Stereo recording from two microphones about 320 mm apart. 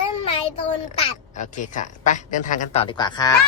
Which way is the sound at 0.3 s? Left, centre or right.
Centre.